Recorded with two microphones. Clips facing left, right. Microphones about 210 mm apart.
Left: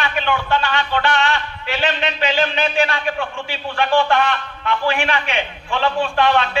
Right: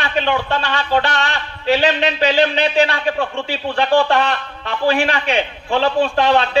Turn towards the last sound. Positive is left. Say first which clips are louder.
# right 2 dB
turn(degrees=-35)  # may be behind; listen again after turning